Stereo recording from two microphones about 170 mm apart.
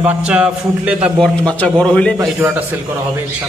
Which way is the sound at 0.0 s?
10° right (ahead or behind).